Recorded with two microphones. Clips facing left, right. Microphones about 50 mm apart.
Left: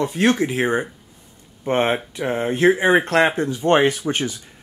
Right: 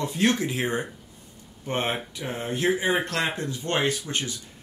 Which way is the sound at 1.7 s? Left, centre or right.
Left.